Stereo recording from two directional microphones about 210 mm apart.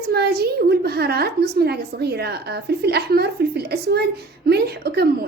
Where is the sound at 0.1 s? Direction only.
50° right (ahead or behind).